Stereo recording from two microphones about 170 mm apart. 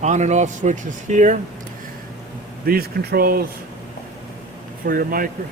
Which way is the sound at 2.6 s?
60° right (ahead or behind).